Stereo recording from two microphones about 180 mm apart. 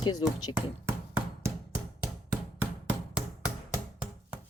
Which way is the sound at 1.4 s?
15° right (ahead or behind).